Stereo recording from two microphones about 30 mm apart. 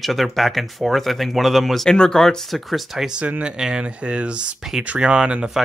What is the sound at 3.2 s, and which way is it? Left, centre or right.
Speech, right.